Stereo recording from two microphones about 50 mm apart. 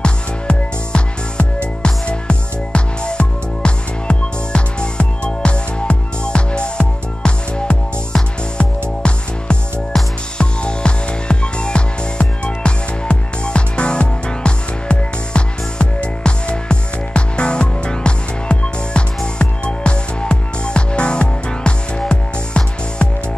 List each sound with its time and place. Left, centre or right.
0.0 s music: left